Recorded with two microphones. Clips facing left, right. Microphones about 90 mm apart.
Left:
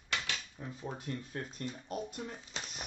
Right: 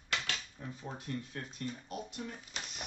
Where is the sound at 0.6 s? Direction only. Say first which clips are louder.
Even; 20° left (ahead or behind).